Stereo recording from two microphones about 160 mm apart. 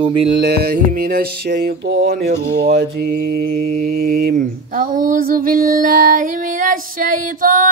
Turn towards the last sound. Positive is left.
turn(degrees=-55)  # may be behind; listen again after turning